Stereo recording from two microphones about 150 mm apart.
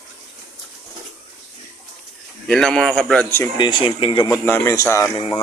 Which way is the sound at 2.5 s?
5° left (ahead or behind).